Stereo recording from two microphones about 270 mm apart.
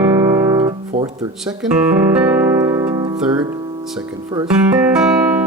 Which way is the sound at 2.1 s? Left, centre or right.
Centre.